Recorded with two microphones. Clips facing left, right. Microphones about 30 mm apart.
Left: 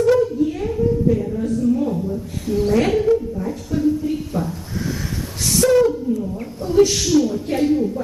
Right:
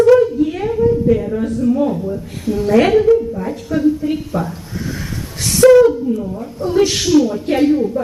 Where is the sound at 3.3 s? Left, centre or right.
Right.